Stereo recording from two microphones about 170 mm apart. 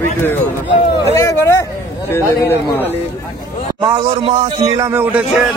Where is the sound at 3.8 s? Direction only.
30° right (ahead or behind).